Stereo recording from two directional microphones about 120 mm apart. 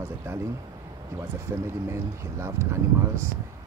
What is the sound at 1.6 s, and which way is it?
Speech, 25° right (ahead or behind).